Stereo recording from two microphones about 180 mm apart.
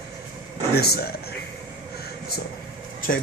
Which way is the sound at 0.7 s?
60° left (ahead or behind).